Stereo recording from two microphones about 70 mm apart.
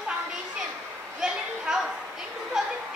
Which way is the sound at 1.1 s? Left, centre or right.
Centre.